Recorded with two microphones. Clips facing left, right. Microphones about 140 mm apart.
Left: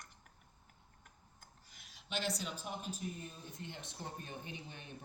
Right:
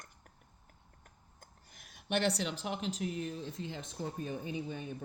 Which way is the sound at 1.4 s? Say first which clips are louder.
Right 5 dB; 50° right (ahead or behind).